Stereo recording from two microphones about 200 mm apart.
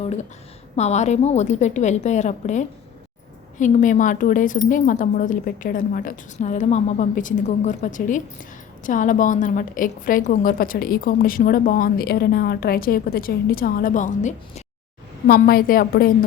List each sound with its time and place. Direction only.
0.8 s a woman's voice: 35° left (ahead or behind)
15.3 s a woman's voice: 50° left (ahead or behind)